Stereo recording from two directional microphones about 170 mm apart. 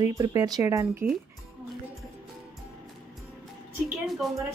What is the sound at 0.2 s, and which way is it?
Speech, 20° right (ahead or behind).